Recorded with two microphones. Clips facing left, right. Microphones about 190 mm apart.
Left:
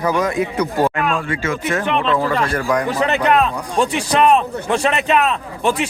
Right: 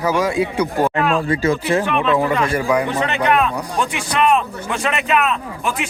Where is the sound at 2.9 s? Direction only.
40° left (ahead or behind).